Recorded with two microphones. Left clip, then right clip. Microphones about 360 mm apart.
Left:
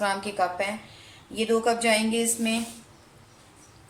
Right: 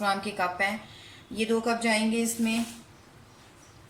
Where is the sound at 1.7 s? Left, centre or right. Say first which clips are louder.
Left 4 dB; left.